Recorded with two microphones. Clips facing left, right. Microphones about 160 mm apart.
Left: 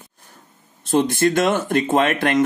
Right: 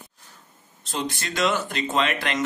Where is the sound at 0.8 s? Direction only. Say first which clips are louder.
Left 13 dB; 50° left (ahead or behind).